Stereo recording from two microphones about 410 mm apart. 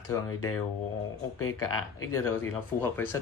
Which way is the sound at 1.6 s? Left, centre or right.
Left.